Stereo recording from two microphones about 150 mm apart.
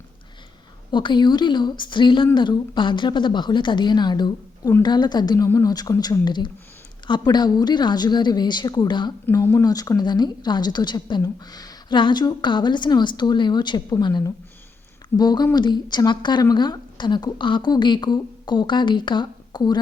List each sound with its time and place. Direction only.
0.9 s a woman's voice: 30° left (ahead or behind)
9.3 s a woman's voice: 15° left (ahead or behind)